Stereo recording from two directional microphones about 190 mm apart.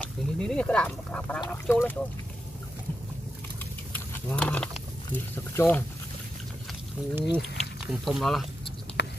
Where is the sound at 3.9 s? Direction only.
5° left (ahead or behind).